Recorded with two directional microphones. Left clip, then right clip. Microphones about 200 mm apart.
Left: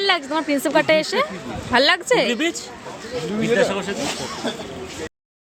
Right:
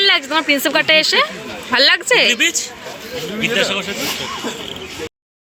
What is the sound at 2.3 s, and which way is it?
Speech, 50° left (ahead or behind).